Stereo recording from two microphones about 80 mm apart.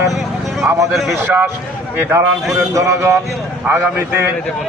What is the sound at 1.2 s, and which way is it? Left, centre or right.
Speech, right.